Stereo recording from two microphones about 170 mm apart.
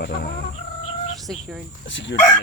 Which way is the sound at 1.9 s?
90° left.